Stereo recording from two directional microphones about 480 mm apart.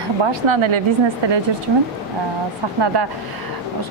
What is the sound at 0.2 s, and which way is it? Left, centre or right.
Speech, right.